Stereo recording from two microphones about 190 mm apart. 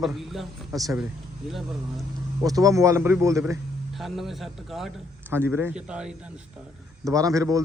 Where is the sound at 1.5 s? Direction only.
Centre (ahead or behind).